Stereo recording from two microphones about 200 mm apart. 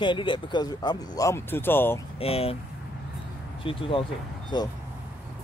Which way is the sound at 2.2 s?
30° left (ahead or behind).